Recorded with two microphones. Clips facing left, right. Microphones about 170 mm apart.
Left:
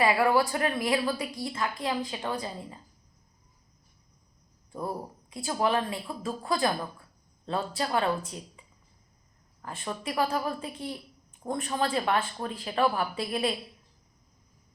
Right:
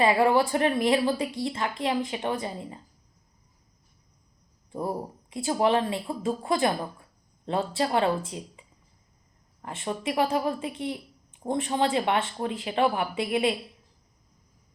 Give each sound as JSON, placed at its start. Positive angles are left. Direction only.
{"t": 0.0, "sound": "speech", "side_deg": -25}
{"t": 4.7, "sound": "speech", "side_deg": -25}
{"t": 9.6, "sound": "speech", "side_deg": -25}